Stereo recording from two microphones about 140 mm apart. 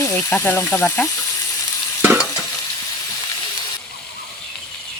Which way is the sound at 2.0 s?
15° right (ahead or behind).